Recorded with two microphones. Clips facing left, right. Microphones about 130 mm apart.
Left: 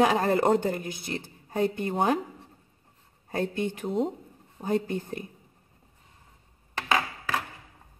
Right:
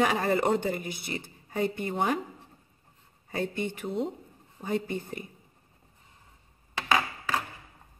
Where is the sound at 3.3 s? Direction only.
45° left (ahead or behind).